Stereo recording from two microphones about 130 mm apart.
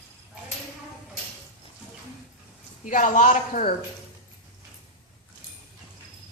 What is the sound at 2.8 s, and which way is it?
Speech, 85° left.